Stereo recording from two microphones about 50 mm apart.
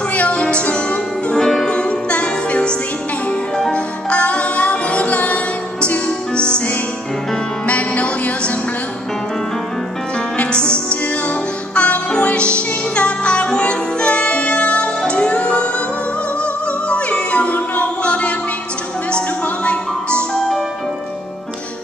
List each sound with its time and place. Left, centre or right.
0.1 s music: left
1.8 s music: left
3.7 s music: left
7.6 s music: left
10.3 s music: left
11.7 s music: left
16.9 s music: left
19.4 s music: left
20.3 s music: centre